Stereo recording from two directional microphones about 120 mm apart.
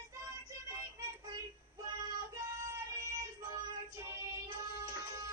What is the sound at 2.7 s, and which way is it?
Music, 25° right (ahead or behind).